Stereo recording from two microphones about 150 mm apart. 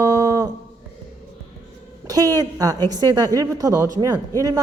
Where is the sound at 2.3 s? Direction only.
25° right (ahead or behind).